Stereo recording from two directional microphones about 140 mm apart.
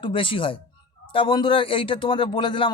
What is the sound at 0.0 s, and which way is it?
Speech, 40° left (ahead or behind).